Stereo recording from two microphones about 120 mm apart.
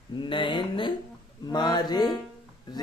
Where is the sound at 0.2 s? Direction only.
40° left (ahead or behind).